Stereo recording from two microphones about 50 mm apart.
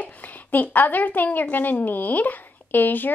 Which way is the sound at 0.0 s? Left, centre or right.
Left.